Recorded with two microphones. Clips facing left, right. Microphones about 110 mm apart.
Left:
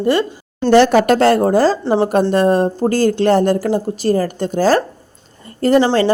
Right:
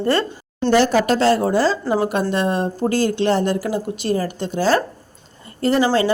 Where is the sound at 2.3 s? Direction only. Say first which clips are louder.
Left 7 dB; 40° left (ahead or behind).